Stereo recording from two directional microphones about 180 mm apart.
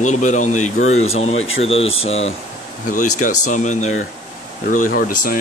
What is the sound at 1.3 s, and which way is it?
Speech, 90° left.